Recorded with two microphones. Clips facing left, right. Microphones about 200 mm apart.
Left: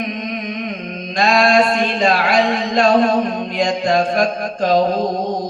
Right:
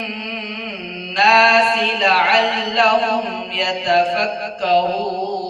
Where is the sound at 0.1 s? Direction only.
45° left (ahead or behind).